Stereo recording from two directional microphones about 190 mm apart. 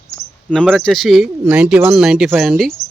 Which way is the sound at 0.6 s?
Centre (ahead or behind).